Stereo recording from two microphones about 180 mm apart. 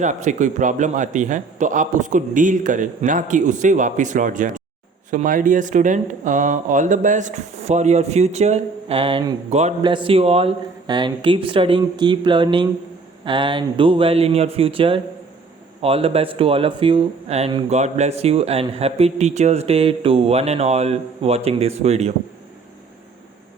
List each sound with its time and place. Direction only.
0.0 s a man's voice: 45° right (ahead or behind)
9.8 s a man's voice: 25° right (ahead or behind)